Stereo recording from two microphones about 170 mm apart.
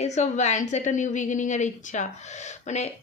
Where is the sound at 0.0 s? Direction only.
45° left (ahead or behind).